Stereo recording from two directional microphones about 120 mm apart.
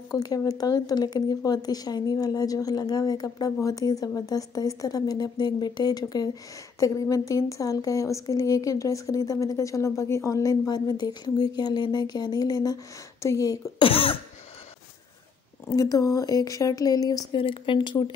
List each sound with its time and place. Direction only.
0.1 s a woman's voice: 30° left (ahead or behind)
13.7 s speech: 50° left (ahead or behind)
15.7 s a woman's voice: 30° left (ahead or behind)
17.4 s speech: 45° left (ahead or behind)